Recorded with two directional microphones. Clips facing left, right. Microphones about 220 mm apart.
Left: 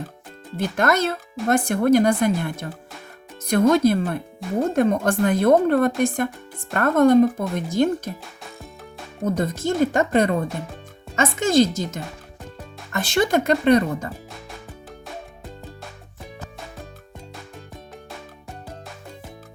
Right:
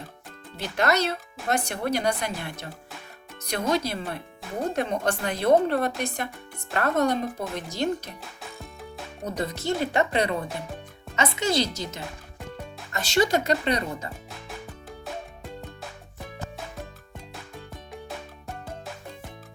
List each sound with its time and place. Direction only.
0.5 s speech: 50° left (ahead or behind)
9.2 s speech: 50° left (ahead or behind)